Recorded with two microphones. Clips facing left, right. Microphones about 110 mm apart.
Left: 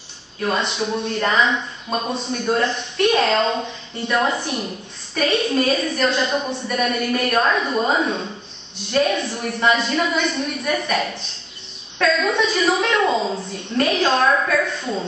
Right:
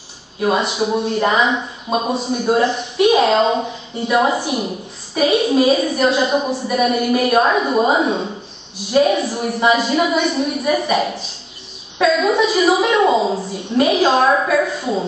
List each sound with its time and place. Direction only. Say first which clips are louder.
0.4 s a woman's voice: right 5 dB; 5° right (ahead or behind)
14.1 s a woman's voice: right 3 dB; 20° right (ahead or behind)
14.7 s a woman's voice: right 5 dB; 5° right (ahead or behind)